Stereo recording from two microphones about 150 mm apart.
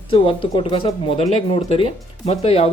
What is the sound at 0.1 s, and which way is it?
Speech, 35° left (ahead or behind).